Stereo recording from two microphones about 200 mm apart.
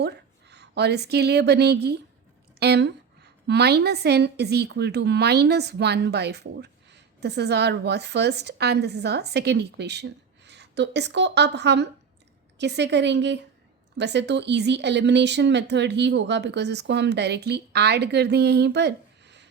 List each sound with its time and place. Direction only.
0.0 s a woman's voice: 55° right (ahead or behind)